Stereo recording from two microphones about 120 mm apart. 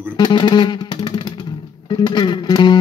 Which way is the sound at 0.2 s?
40° left (ahead or behind).